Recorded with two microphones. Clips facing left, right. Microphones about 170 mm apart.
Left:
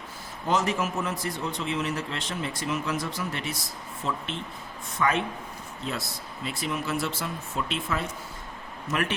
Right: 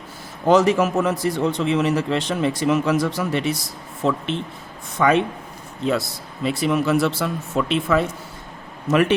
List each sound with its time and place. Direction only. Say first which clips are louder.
0.4 s a man's voice: right 10 dB; 80° right
4.9 s a man's voice: right 8 dB; 85° right
5.8 s speech: right 12 dB; 75° right (ahead or behind)
8.9 s a man's voice: right 11 dB; 90° right